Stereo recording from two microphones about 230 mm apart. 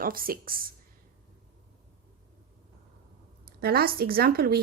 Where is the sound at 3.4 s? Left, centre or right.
Right.